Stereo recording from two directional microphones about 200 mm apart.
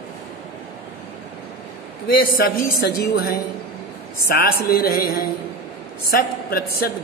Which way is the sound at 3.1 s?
50° left (ahead or behind).